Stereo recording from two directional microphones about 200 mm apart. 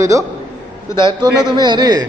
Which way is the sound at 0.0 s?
15° right (ahead or behind).